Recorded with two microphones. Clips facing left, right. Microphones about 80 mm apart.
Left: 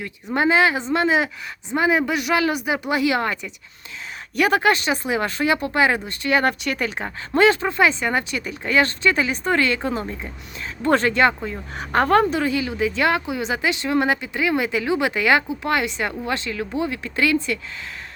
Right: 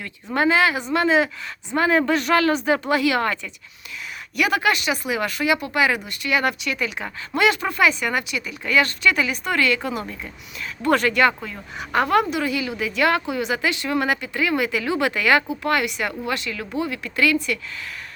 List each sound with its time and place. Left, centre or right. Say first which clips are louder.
0.0 s a woman's voice: even; left
4.4 s a woman's voice: left 3 dB; left
11.8 s a woman's voice: left 2 dB; left